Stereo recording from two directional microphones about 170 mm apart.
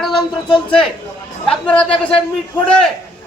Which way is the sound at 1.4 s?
5° left (ahead or behind).